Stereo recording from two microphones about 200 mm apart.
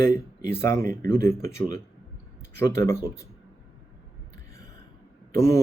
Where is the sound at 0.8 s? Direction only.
45° right (ahead or behind).